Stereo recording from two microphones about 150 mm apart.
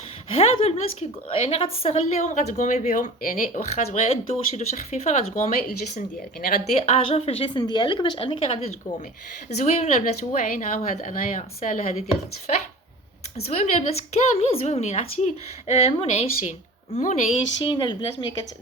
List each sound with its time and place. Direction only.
0.3 s a woman's voice: 40° left (ahead or behind)
13.3 s a woman's voice: 45° left (ahead or behind)
17.6 s speech: 30° left (ahead or behind)